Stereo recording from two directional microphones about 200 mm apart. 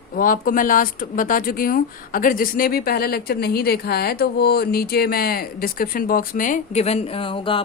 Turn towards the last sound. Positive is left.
turn(degrees=25)  # may be behind; listen again after turning